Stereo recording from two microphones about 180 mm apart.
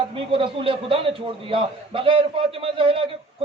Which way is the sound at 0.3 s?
30° right (ahead or behind).